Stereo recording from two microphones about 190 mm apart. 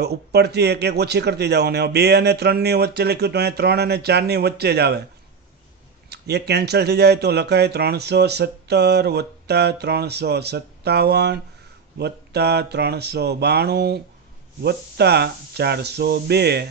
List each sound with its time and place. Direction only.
0.0 s speech: 60° right (ahead or behind)
6.0 s speech: 60° right (ahead or behind)